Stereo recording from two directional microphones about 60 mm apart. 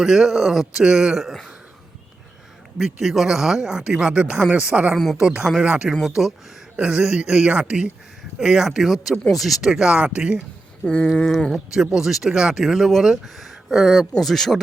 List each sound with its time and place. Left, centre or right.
0.0 s speech: centre
2.7 s speech: centre; by 4.9 s right
5.2 s speech: centre
5.9 s speech: centre
10.8 s a sound: centre
11.3 s speech: centre
11.5 s speech: centre